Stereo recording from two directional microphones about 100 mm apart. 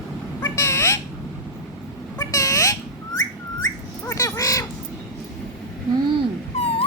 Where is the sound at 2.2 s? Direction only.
35° left (ahead or behind).